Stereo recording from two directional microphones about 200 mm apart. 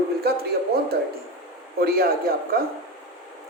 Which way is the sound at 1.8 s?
50° right (ahead or behind).